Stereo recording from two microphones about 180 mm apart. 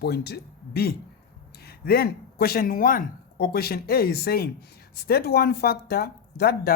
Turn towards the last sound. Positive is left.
turn(degrees=60)  # may be behind; listen again after turning